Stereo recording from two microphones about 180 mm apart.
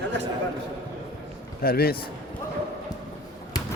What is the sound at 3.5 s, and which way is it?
Basketball bounce, 20° left (ahead or behind).